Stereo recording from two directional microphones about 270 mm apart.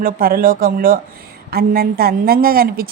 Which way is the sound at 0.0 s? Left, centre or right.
Right.